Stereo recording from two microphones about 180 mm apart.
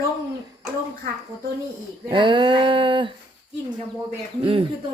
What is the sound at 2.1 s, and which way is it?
Speech, 25° right (ahead or behind).